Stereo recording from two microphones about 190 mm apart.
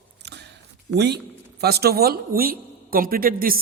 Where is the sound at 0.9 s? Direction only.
60° right (ahead or behind).